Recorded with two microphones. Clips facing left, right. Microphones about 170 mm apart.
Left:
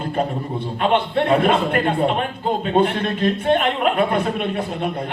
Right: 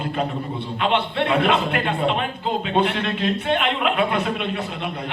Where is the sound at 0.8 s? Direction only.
45° left (ahead or behind).